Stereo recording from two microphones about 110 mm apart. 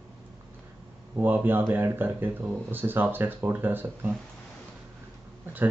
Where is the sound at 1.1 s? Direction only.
15° right (ahead or behind).